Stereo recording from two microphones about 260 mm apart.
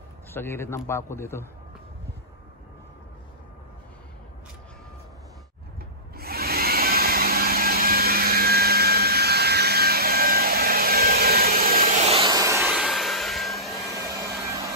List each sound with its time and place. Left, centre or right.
0.3 s a man's voice: centre
6.1 s vacuum cleaner: right; by 13.7 s centre